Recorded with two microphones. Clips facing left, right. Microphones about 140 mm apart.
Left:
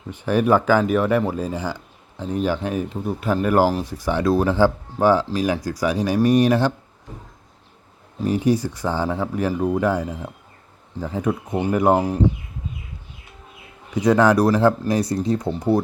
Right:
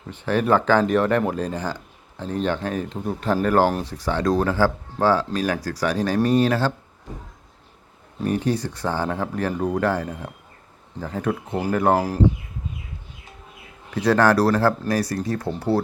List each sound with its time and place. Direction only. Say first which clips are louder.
0.1 s speech: left 2 dB; 10° left (ahead or behind)
8.2 s speech: left 3 dB; 10° left (ahead or behind)
11.9 s speech: left 2 dB; centre (ahead or behind)
13.9 s speech: left 2 dB; 15° left (ahead or behind)